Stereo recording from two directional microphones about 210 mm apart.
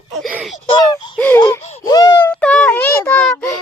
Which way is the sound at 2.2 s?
5° left (ahead or behind).